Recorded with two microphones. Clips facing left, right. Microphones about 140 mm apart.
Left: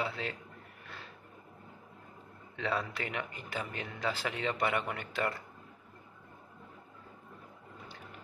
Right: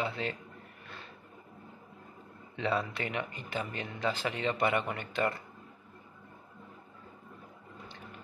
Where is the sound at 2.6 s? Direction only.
Centre (ahead or behind).